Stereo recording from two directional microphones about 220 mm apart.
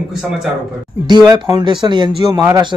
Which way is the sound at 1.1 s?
20° right (ahead or behind).